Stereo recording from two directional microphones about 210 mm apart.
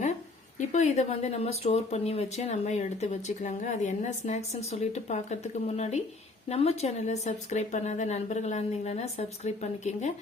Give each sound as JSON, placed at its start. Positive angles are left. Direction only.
{"t": 0.7, "sound": "speech", "side_deg": 35}